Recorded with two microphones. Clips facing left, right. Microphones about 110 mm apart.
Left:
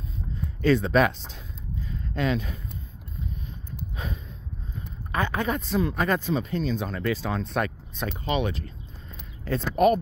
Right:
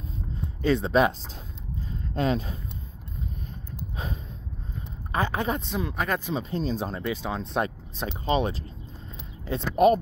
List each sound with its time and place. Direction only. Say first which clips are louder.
0.4 s speech: left 2 dB; 20° right (ahead or behind)
1.9 s a sound: right 1 dB; 35° right (ahead or behind)
3.9 s a sound: right 1 dB; 35° right (ahead or behind)
5.1 s speech: even; 30° right (ahead or behind)
5.8 s speech: left 4 dB; 5° right (ahead or behind)
6.5 s speech: left 1 dB; 35° right (ahead or behind)
7.0 s speech: left 2 dB; 20° right (ahead or behind)
9.4 s speech: right 1 dB; 20° right (ahead or behind)